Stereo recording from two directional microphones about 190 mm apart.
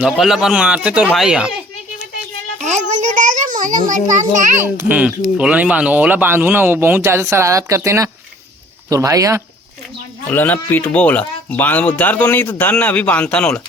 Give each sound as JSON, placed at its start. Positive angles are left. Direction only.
{"t": 0.0, "sound": "speech", "side_deg": -5}
{"t": 2.6, "sound": "a sound", "side_deg": -40}
{"t": 3.6, "sound": "a child's voice", "side_deg": -45}
{"t": 4.5, "sound": "speech", "side_deg": -10}
{"t": 10.2, "sound": "speech", "side_deg": 10}